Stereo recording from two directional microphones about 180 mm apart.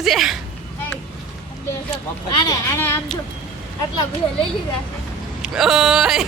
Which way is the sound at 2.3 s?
20° left (ahead or behind).